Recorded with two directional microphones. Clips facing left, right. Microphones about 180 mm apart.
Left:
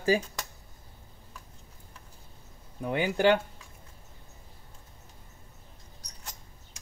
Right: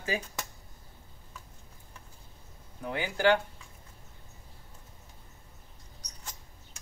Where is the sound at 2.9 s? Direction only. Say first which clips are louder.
Left 3 dB; 25° left (ahead or behind).